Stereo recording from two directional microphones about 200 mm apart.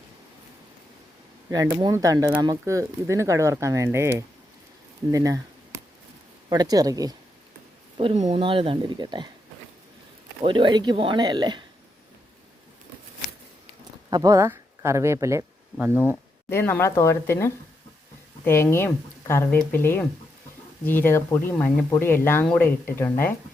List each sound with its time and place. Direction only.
1.5 s speech: 15° right (ahead or behind)
5.1 s a sound: 15° right (ahead or behind)
6.5 s speech: 20° right (ahead or behind)
7.9 s speech: 30° right (ahead or behind)
10.4 s speech: 25° right (ahead or behind)
14.1 s speech: 20° right (ahead or behind)
16.5 s speech: 10° left (ahead or behind)